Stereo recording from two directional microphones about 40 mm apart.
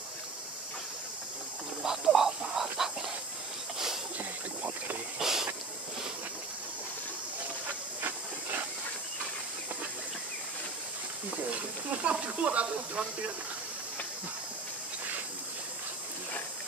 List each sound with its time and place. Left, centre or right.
1.8 s a sound: centre
4.2 s boat: right
5.2 s hiss: centre
11.5 s speech: right